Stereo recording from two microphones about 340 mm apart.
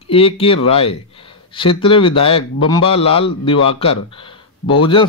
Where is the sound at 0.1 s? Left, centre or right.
Centre.